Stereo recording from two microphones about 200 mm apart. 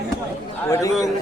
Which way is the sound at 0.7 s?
15° left (ahead or behind).